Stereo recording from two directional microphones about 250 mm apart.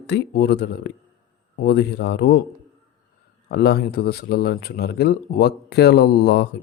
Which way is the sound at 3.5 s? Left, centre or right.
Left.